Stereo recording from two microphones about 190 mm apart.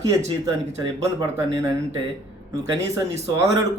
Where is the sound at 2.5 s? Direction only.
15° right (ahead or behind).